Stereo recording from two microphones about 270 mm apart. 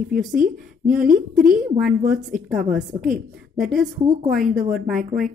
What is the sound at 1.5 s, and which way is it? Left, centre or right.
Speech, right.